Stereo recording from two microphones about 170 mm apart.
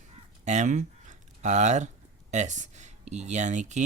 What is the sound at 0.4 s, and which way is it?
Speech, 45° right (ahead or behind).